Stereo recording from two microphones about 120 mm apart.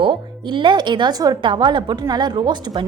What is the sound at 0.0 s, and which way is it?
A woman's voice, 45° right (ahead or behind).